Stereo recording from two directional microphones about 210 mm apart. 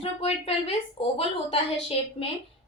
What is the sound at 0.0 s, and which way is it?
Speech, 30° left (ahead or behind).